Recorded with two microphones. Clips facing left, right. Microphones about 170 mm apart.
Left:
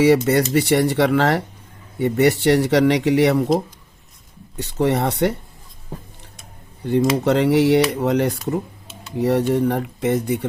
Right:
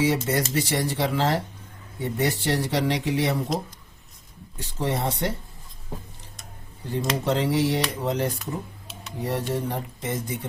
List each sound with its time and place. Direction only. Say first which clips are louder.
0.0 s speech: left 8 dB; 70° left (ahead or behind)
4.5 s speech: left 8 dB; 70° left (ahead or behind)
6.8 s speech: left 8 dB; 70° left (ahead or behind)